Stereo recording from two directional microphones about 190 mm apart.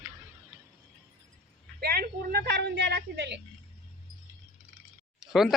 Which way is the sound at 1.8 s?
55° right (ahead or behind).